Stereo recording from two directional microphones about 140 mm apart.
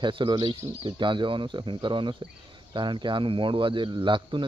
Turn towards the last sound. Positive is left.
turn(degrees=-35)  # may be behind; listen again after turning